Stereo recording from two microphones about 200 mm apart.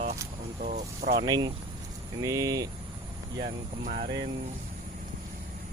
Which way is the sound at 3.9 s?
45° right (ahead or behind).